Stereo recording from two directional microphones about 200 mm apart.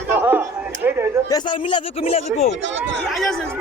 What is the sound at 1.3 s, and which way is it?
Speech, 20° left (ahead or behind).